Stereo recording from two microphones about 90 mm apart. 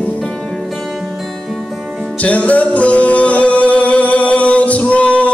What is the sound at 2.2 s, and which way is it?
Music, 15° left (ahead or behind).